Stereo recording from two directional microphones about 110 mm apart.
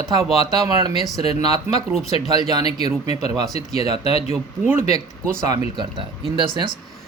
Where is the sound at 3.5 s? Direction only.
70° left (ahead or behind).